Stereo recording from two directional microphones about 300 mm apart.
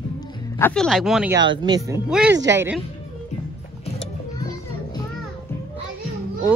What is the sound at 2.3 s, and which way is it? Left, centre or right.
Speech, right.